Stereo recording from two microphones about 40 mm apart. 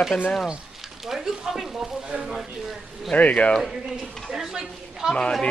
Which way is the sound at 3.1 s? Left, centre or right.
Left.